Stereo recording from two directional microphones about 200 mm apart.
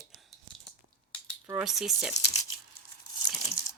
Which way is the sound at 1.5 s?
5° right (ahead or behind).